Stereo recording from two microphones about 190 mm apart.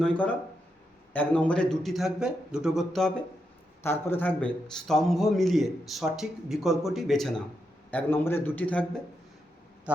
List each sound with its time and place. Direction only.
0.0 s a man's voice: 5° left (ahead or behind)
3.8 s a man's voice: 10° left (ahead or behind)